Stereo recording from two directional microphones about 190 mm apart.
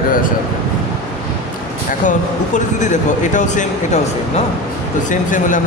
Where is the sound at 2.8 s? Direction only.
40° left (ahead or behind).